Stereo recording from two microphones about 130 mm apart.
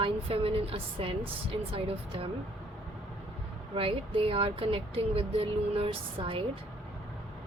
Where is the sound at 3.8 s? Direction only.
45° right (ahead or behind).